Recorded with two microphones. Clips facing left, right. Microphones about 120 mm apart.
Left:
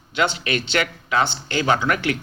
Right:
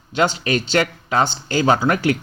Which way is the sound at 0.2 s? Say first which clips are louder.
Right 3 dB; 35° right (ahead or behind).